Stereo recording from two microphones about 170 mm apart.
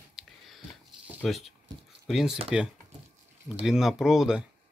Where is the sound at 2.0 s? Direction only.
5° right (ahead or behind).